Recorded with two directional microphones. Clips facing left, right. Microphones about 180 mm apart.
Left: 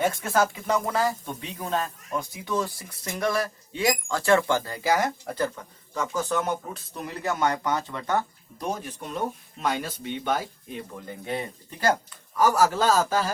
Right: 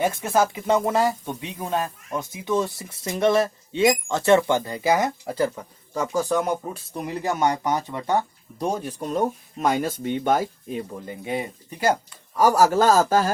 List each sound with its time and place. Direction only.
0.0 s speech: 15° right (ahead or behind)
6.3 s speech: 15° right (ahead or behind)
8.5 s speech: 30° right (ahead or behind)
11.0 s speech: 15° right (ahead or behind)
12.7 s speech: 45° right (ahead or behind)